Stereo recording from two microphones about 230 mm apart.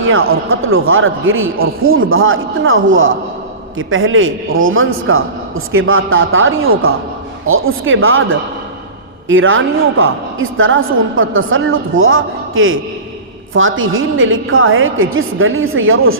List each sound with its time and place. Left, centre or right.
0.0 s a woman's voice: right